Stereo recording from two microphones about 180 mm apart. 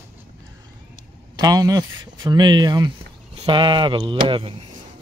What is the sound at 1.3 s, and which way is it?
Speech, 20° right (ahead or behind).